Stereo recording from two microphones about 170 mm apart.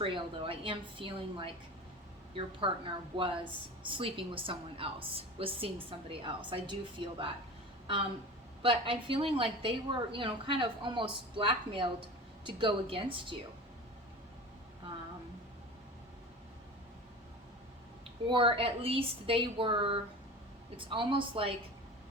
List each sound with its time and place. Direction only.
0.0 s a woman's voice: 30° right (ahead or behind)
8.6 s a woman's voice: 30° right (ahead or behind)
18.3 s a woman's voice: 30° right (ahead or behind)